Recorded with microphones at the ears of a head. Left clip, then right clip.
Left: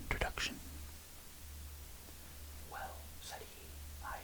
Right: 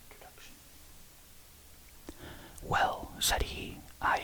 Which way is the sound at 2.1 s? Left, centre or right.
Right.